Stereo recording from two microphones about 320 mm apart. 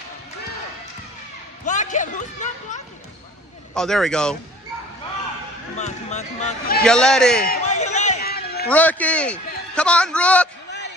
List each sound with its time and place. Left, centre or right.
1.7 s a sound: left
3.7 s a man's voice: centre
5.8 s speech: left
6.8 s a man's voice: centre
7.4 s a sound: left
8.6 s a man's voice: centre